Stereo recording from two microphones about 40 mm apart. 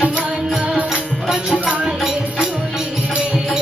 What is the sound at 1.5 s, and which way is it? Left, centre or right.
Music, right.